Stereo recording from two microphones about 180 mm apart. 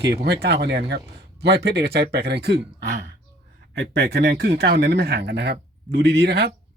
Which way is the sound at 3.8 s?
65° right (ahead or behind).